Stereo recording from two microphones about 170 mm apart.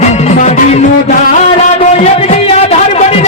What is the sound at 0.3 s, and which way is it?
Music, 45° left (ahead or behind).